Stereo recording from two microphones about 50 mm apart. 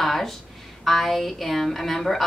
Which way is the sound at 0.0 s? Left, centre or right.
Centre.